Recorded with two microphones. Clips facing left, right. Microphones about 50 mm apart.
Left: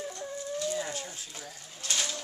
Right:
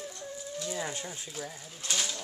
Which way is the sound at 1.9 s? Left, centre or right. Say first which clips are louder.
Left 1 dB; centre.